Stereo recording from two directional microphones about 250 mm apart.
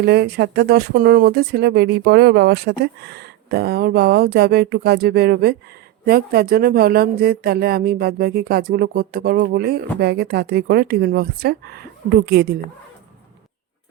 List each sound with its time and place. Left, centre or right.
0.0 s speech: right